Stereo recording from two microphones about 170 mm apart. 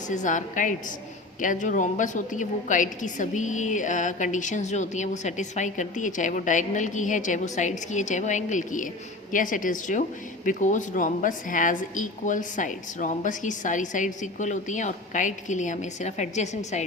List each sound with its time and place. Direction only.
0.1 s a woman's voice: 45° left (ahead or behind)